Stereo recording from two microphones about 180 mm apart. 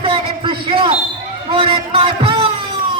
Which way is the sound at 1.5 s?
30° right (ahead or behind).